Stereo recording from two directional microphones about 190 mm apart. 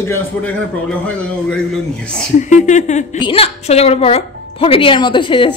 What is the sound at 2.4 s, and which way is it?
A woman's voice, 40° left (ahead or behind).